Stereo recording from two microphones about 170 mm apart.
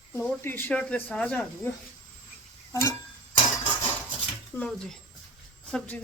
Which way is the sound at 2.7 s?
15° left (ahead or behind).